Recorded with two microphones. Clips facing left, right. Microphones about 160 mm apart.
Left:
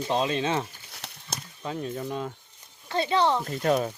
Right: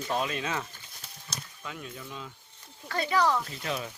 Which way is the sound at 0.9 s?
75° left (ahead or behind).